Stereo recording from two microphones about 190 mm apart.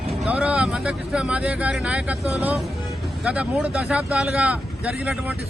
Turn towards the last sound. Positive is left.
turn(degrees=-5)  # may be behind; listen again after turning